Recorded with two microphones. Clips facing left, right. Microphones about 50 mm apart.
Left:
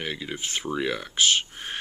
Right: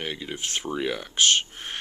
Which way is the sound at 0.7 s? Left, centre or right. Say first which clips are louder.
Left 2 dB; centre.